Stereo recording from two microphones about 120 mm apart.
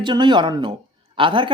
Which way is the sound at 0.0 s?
40° right (ahead or behind).